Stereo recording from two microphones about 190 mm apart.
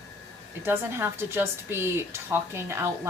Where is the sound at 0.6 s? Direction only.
10° right (ahead or behind).